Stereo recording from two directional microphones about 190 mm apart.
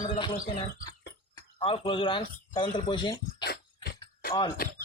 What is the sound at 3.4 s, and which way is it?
Dog, 55° left (ahead or behind).